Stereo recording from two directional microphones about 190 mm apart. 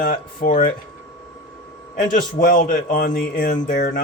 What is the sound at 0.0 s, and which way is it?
Speech, 45° left (ahead or behind).